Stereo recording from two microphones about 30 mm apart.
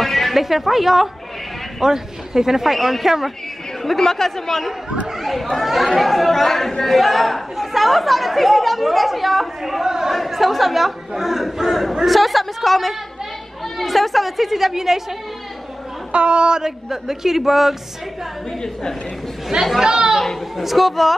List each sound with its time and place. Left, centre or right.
0.0 s music: centre
0.4 s a man's voice: centre
2.6 s speech: centre
4.0 s speech: centre
9.8 s a man's voice: centre
10.1 s speech: centre
16.1 s a man's voice: right
16.6 s a man's voice: centre
19.8 s speech: right
20.5 s speech: centre